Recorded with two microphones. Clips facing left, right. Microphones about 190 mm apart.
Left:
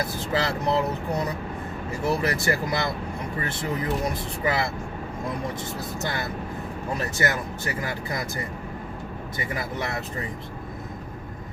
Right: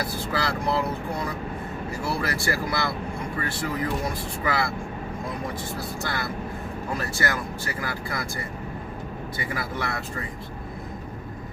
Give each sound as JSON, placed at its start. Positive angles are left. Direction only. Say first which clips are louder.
{"t": 0.3, "sound": "speech", "louder": "left 2 dB", "side_deg": 20}
{"t": 2.0, "sound": "speech", "louder": "left 4 dB", "side_deg": 20}
{"t": 4.0, "sound": "speech", "louder": "left 2 dB", "side_deg": 20}
{"t": 6.0, "sound": "speech", "louder": "left 2 dB", "side_deg": 20}
{"t": 9.4, "sound": "speech", "louder": "left 1 dB", "side_deg": 20}